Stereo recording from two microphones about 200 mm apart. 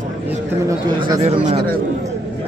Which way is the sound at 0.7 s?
20° right (ahead or behind).